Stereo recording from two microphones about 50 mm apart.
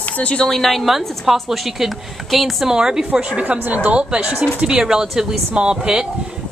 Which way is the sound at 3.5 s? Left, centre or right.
Right.